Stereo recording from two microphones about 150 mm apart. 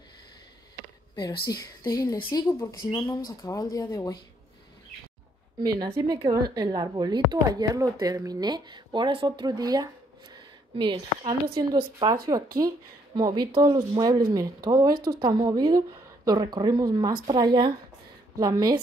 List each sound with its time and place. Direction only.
1.5 s speech: 25° left (ahead or behind)
5.9 s a woman's voice: 25° right (ahead or behind)
10.3 s a sound: 30° right (ahead or behind)
11.5 s a woman's voice: 30° right (ahead or behind)